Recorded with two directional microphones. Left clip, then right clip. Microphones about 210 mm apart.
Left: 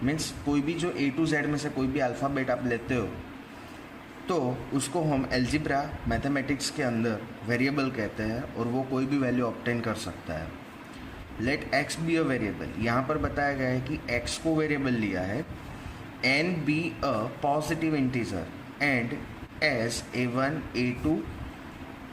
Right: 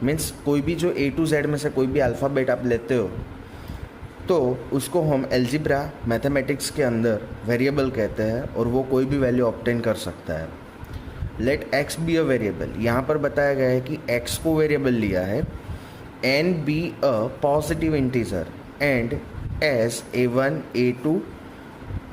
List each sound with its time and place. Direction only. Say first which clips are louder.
0.0 s speech: right 6 dB; 55° right (ahead or behind)
4.3 s speech: right 8 dB; 45° right (ahead or behind)
11.4 s a man's voice: right 5 dB; 50° right (ahead or behind)